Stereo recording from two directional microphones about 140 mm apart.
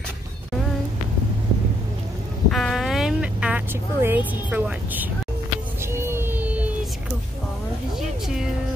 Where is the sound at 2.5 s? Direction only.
Centre (ahead or behind).